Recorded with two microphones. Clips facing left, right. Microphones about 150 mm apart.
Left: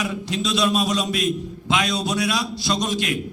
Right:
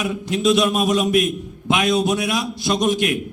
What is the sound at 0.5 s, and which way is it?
Speech, 55° right (ahead or behind).